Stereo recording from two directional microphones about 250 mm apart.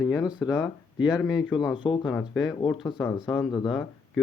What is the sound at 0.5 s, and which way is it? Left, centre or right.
A man's voice, centre.